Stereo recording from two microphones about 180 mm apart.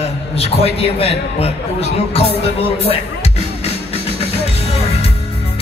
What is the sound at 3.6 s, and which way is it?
Music, 35° left (ahead or behind).